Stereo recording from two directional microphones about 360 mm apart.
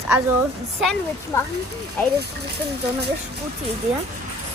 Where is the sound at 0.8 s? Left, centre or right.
Centre.